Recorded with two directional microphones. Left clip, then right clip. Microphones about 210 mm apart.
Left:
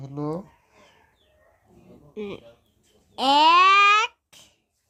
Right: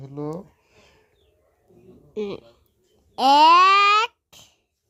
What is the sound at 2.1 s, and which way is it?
Speech, 30° right (ahead or behind).